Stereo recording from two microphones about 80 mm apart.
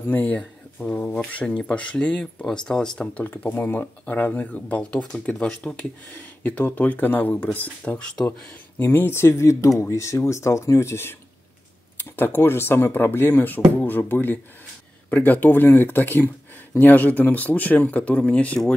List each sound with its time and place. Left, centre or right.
0.1 s speech: centre
8.3 s speech: left
12.2 s speech: left